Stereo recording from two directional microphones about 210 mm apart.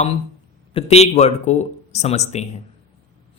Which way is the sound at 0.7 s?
30° left (ahead or behind).